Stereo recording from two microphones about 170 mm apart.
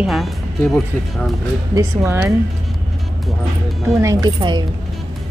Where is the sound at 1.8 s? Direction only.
15° right (ahead or behind).